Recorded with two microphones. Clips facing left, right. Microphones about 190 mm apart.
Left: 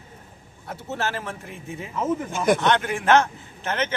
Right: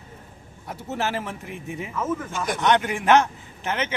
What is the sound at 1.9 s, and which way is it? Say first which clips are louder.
Speech: left 3 dB; 30° left (ahead or behind).